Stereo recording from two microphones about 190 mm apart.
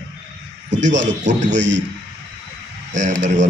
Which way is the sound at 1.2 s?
40° right (ahead or behind).